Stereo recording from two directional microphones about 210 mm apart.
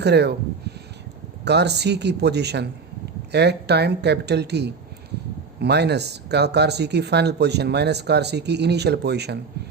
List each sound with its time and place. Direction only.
0.0 s speech: 50° right (ahead or behind)
1.5 s speech: 50° right (ahead or behind)